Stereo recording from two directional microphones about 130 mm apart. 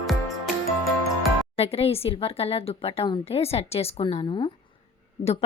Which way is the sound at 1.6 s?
50° left (ahead or behind).